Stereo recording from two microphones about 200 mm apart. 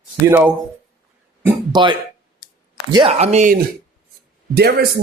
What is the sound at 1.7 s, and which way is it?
Speech, 25° right (ahead or behind).